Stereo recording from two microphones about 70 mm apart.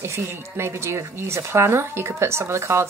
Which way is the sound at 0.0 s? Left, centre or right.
Right.